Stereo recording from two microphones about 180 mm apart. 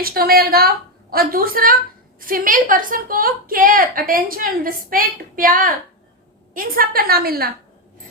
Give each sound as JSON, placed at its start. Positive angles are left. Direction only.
{"t": 0.0, "sound": "a woman's voice", "side_deg": -55}